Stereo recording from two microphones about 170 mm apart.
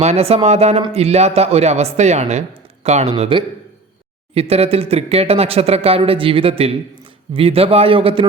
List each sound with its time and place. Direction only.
0.0 s speech: 35° right (ahead or behind)